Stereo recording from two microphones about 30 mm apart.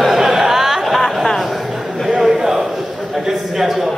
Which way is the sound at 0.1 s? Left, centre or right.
Centre.